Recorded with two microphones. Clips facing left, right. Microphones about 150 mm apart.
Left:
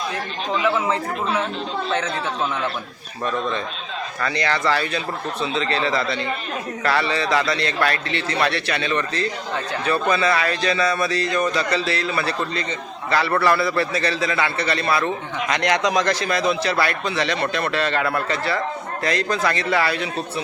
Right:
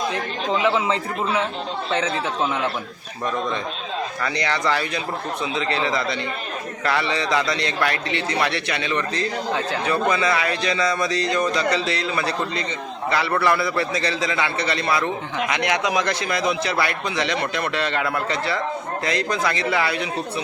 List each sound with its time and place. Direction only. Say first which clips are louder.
4.2 s a man's voice: left 3 dB; 20° right (ahead or behind)